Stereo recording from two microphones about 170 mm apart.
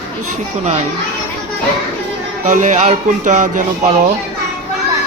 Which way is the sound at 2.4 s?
50° right (ahead or behind).